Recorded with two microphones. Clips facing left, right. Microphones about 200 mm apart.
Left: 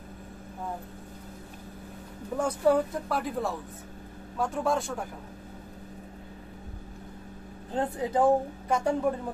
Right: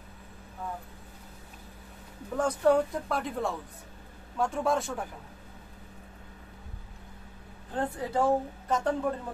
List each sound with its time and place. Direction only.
2.3 s speech: 10° left (ahead or behind)
7.7 s a woman's voice: 20° left (ahead or behind)